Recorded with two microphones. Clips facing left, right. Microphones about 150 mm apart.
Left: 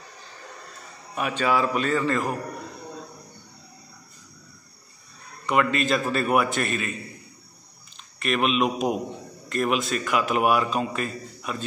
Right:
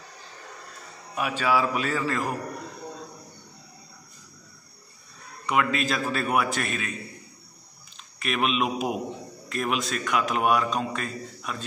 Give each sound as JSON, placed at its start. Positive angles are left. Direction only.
{"t": 1.1, "sound": "a man's voice", "side_deg": -5}
{"t": 5.5, "sound": "a man's voice", "side_deg": 0}
{"t": 8.2, "sound": "a man's voice", "side_deg": 0}